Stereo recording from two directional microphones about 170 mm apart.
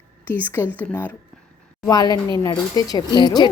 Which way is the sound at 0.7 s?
10° left (ahead or behind).